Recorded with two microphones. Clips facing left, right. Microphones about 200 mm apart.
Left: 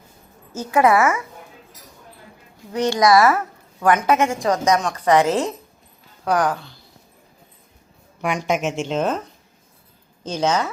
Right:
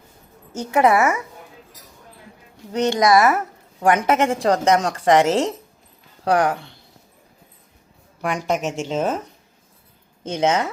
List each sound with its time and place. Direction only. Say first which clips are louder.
0.6 s a woman's voice: even; 20° right (ahead or behind)
2.8 s a woman's voice: left 1 dB; 20° right (ahead or behind)
8.2 s a woman's voice: left 1 dB; centre (ahead or behind)
10.2 s a woman's voice: right 1 dB; 25° right (ahead or behind)